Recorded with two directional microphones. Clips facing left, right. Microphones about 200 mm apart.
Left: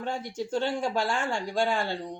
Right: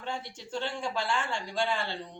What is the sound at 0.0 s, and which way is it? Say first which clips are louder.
Speech: left 6 dB; 45° left (ahead or behind).